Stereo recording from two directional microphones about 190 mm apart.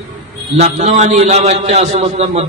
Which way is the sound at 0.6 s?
35° right (ahead or behind).